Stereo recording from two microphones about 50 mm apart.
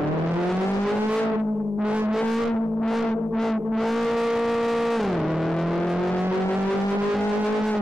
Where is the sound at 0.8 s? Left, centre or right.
Centre.